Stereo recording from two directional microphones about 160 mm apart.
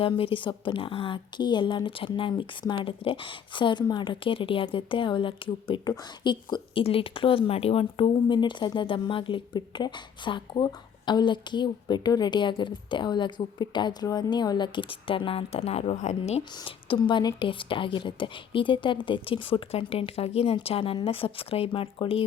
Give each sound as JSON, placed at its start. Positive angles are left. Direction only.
{"t": 0.0, "sound": "a woman's voice", "side_deg": 35}
{"t": 16.4, "sound": "a woman's voice", "side_deg": 30}